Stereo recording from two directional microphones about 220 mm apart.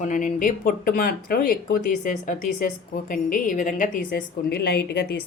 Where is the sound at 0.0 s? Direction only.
35° left (ahead or behind).